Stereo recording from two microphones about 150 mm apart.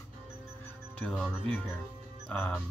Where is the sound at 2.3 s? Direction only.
5° left (ahead or behind).